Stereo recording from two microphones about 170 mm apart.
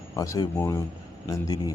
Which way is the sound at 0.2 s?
20° left (ahead or behind).